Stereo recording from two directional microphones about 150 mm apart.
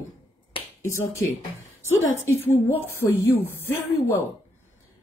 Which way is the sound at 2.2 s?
15° left (ahead or behind).